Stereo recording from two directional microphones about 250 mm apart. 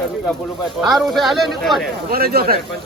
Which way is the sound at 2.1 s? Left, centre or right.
Right.